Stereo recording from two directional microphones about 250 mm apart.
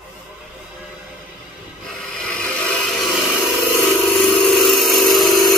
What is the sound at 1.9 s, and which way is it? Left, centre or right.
Wood, centre.